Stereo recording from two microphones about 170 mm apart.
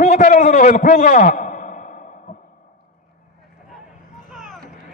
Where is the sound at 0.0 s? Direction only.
45° left (ahead or behind).